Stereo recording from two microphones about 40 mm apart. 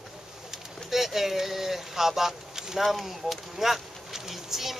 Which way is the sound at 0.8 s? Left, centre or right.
Centre.